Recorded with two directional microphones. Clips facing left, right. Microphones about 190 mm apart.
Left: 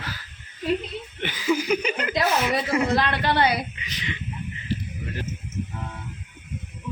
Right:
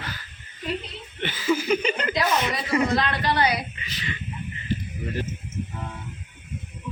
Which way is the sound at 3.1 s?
60° left (ahead or behind).